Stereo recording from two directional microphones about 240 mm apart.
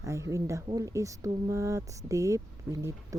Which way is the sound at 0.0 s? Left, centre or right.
Centre.